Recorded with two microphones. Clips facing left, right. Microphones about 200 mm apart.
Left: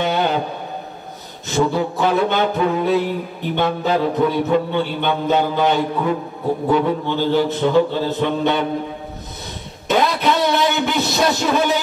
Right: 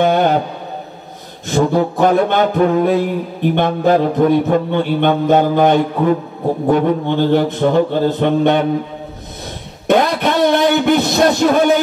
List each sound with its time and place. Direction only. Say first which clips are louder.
0.0 s music: right 6 dB; 50° right (ahead or behind)
1.5 s a sound: right 4 dB; 50° right (ahead or behind)
9.8 s music: right 4 dB; 50° right (ahead or behind)